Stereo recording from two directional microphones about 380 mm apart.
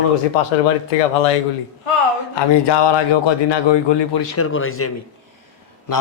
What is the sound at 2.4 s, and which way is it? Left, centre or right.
A man's voice, left.